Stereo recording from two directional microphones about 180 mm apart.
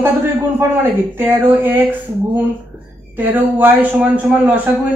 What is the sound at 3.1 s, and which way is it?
A man's voice, 10° right (ahead or behind).